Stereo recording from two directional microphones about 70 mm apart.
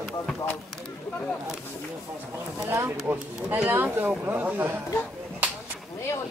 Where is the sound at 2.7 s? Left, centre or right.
Right.